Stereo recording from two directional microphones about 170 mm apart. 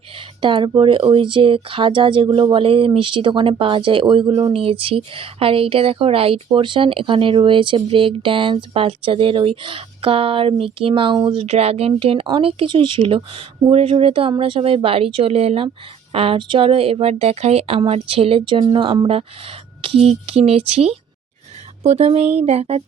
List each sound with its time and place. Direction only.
0.4 s speech: 30° right (ahead or behind)